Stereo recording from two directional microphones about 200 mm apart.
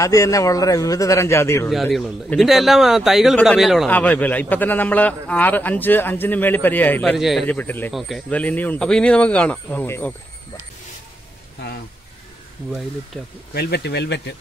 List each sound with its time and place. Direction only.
0.0 s speech: 15° left (ahead or behind)
1.7 s speech: centre (ahead or behind)
13.5 s speech: 55° left (ahead or behind)